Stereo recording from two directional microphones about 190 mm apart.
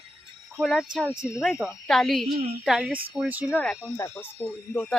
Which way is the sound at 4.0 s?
10° left (ahead or behind).